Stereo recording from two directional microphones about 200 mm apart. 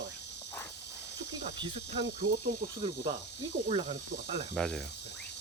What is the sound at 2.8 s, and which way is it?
Speech, 25° right (ahead or behind).